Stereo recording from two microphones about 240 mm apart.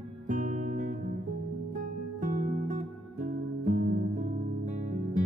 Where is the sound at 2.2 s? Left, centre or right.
Right.